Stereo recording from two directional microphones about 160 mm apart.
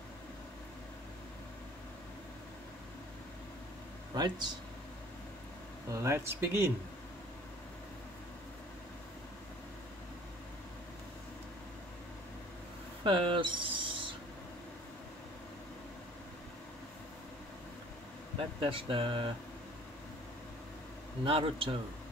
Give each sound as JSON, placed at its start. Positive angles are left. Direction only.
{"t": 4.1, "sound": "speech", "side_deg": -25}
{"t": 5.9, "sound": "speech", "side_deg": -20}
{"t": 13.0, "sound": "a sound", "side_deg": -30}
{"t": 18.6, "sound": "speech", "side_deg": -35}
{"t": 21.2, "sound": "speech", "side_deg": -35}